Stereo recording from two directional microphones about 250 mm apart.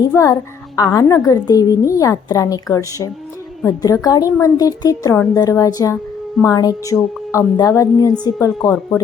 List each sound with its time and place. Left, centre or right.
0.0 s a woman's voice: centre